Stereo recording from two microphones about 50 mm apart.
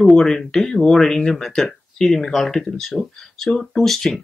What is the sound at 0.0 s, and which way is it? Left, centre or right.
Speech, centre.